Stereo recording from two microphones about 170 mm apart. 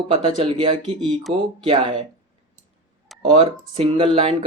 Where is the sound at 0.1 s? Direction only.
30° right (ahead or behind).